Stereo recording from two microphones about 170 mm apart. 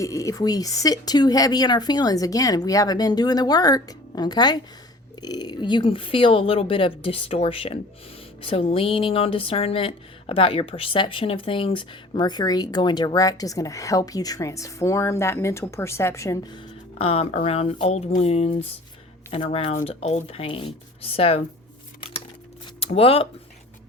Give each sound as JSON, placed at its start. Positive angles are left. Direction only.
{"t": 0.0, "sound": "a woman's voice", "side_deg": 20}
{"t": 16.6, "sound": "a woman's voice", "side_deg": 35}
{"t": 23.0, "sound": "a woman's voice", "side_deg": 35}